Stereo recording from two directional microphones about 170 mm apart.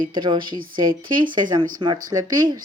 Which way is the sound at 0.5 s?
55° right (ahead or behind).